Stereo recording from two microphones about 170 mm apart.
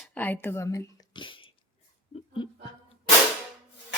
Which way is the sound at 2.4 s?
25° left (ahead or behind).